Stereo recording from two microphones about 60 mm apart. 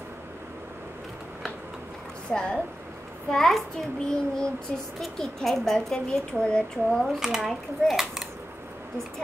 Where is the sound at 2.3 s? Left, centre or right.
Centre.